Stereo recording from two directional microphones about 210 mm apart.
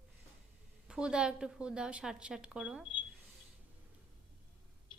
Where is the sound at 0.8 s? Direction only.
5° right (ahead or behind).